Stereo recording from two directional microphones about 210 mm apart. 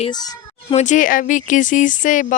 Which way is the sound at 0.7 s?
35° left (ahead or behind).